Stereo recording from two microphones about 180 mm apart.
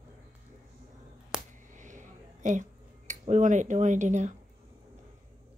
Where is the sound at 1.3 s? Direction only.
5° right (ahead or behind).